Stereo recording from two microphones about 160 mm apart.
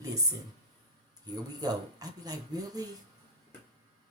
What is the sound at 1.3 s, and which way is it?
Speech, 25° right (ahead or behind).